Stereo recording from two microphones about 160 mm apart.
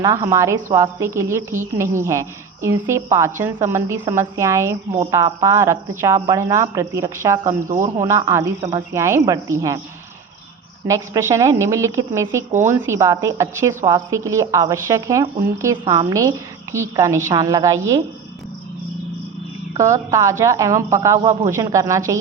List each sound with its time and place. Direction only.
0.0 s a woman's voice: 20° right (ahead or behind)
7.7 s a man's voice: 50° right (ahead or behind)
8.0 s a woman's voice: 15° right (ahead or behind)
10.8 s a woman's voice: 20° right (ahead or behind)
19.7 s a woman's voice: 20° right (ahead or behind)